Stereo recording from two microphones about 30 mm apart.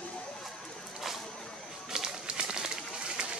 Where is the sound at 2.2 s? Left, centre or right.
Right.